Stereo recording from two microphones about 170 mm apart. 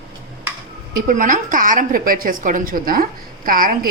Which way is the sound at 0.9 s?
55° right (ahead or behind).